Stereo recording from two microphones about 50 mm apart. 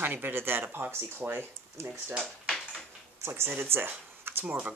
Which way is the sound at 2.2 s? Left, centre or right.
Centre.